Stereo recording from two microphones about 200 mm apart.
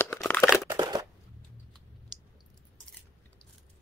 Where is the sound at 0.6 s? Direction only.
20° right (ahead or behind).